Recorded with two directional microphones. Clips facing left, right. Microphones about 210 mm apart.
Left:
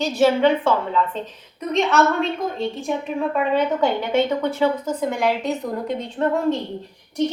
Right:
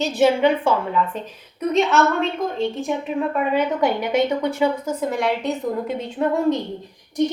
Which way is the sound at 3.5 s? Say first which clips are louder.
Even; 15° right (ahead or behind).